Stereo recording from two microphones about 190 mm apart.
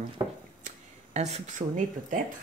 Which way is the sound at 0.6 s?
35° right (ahead or behind).